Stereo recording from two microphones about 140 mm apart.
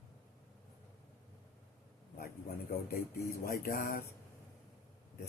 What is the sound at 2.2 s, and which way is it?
A man's voice, 90° left.